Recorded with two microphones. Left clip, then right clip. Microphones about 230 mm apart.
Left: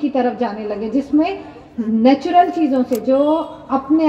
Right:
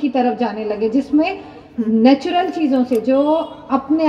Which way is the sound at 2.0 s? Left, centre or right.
Right.